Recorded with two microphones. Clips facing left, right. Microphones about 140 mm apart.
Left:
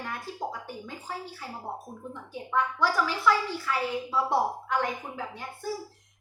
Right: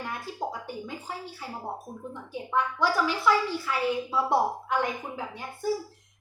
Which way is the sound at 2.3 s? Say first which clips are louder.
Even; 15° right (ahead or behind).